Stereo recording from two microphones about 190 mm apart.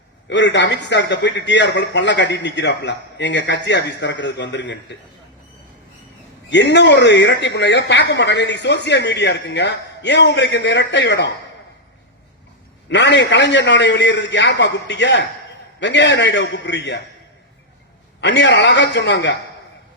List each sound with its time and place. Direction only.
0.3 s speech: 70° left (ahead or behind)
6.5 s speech: 65° left (ahead or behind)
12.9 s speech: 65° left (ahead or behind)
18.2 s a man's voice: 65° left (ahead or behind)